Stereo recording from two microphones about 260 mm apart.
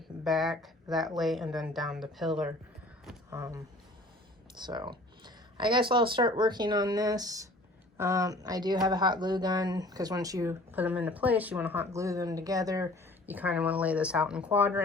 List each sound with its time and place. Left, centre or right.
0.3 s speech: centre